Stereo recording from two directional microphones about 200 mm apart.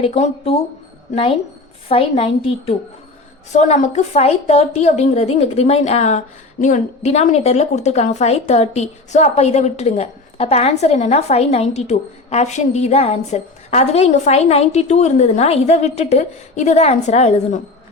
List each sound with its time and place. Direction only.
0.0 s a woman's voice: 30° left (ahead or behind)